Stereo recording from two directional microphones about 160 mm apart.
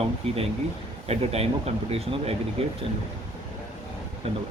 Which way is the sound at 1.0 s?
40° right (ahead or behind).